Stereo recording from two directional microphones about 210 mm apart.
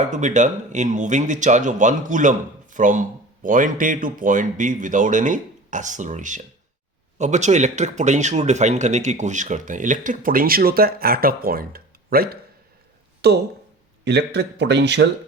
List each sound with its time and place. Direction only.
0.0 s a man's voice: 35° right (ahead or behind); by 15.0 s 55° right (ahead or behind)